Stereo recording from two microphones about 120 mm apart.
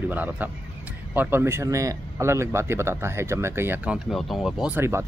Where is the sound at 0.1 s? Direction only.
15° right (ahead or behind).